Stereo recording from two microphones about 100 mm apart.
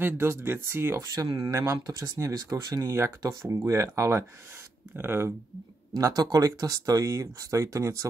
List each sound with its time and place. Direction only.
0.0 s speech: 25° right (ahead or behind)
5.9 s speech: 35° right (ahead or behind)